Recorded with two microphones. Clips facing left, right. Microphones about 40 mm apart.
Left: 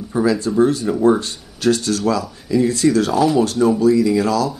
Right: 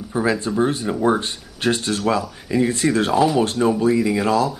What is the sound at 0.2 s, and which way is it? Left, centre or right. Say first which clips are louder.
Speech: left 4 dB; right.